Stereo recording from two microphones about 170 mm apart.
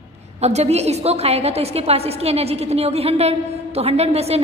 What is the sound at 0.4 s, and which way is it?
A woman's voice, 40° right (ahead or behind).